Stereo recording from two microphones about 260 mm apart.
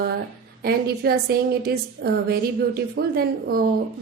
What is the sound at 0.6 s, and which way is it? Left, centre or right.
A woman's voice, right.